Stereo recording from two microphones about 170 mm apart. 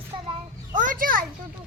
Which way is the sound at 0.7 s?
50° right (ahead or behind).